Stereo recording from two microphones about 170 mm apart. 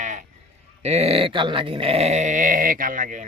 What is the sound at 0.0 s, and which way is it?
Sheep, 45° right (ahead or behind).